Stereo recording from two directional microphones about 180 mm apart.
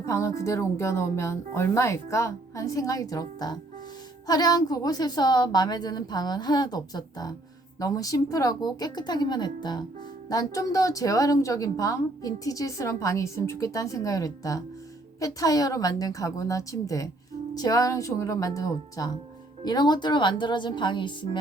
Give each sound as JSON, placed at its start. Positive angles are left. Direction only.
{"t": 0.0, "sound": "a woman's voice", "side_deg": 15}